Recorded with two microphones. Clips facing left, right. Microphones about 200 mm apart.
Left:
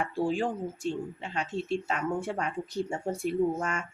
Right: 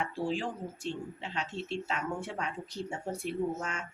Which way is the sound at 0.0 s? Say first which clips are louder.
Left 5 dB; 50° left (ahead or behind).